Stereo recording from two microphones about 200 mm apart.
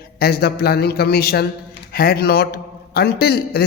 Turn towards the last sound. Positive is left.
turn(degrees=50)  # may be behind; listen again after turning